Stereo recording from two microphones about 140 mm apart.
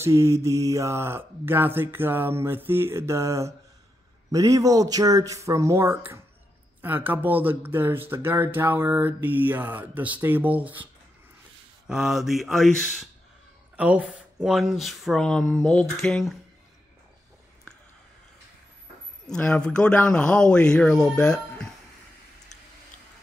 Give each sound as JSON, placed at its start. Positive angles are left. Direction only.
{"t": 0.0, "sound": "speech", "side_deg": -20}
{"t": 11.9, "sound": "speech", "side_deg": -5}
{"t": 19.2, "sound": "speech", "side_deg": 10}